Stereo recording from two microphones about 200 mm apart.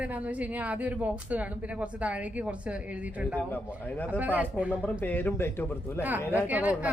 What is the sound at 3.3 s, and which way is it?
Speech, 10° left (ahead or behind).